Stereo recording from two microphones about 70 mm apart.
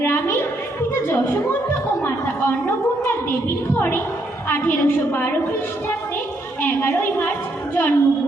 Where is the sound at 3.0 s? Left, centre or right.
Left.